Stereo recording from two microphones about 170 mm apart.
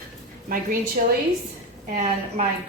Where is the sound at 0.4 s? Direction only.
55° right (ahead or behind).